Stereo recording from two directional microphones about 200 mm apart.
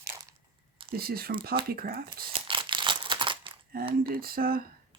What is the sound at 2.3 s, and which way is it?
Crumpling, 25° right (ahead or behind).